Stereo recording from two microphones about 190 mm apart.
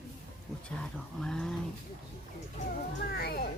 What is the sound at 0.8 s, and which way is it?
Speech, 5° left (ahead or behind).